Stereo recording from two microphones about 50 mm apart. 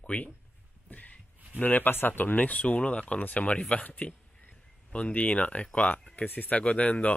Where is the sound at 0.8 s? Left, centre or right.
Left.